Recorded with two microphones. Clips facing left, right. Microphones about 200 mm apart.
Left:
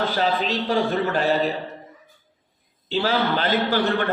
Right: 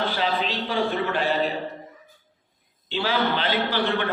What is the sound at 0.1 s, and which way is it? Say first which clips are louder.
A man's voice: left 3 dB; 40° left (ahead or behind).